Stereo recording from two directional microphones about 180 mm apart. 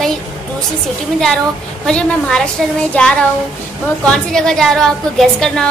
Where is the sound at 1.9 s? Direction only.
5° left (ahead or behind).